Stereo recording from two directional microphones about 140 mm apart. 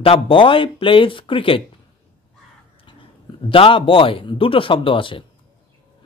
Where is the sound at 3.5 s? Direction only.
40° left (ahead or behind).